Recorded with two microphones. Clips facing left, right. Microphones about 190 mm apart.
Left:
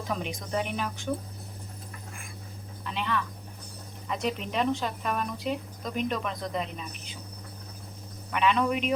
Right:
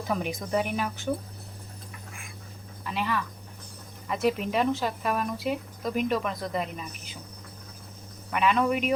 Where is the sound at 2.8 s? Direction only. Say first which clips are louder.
Right 1 dB; 5° right (ahead or behind).